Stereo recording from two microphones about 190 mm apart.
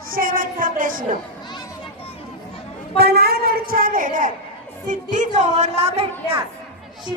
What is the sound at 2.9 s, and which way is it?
A woman's voice, 55° right (ahead or behind).